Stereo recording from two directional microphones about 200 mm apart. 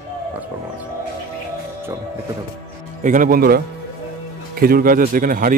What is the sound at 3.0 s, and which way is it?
Speech, 40° right (ahead or behind).